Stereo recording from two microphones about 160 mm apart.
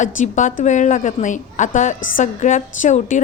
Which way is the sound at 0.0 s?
50° left (ahead or behind).